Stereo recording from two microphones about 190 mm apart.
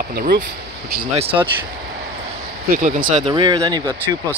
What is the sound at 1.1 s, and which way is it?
Speech, 30° right (ahead or behind).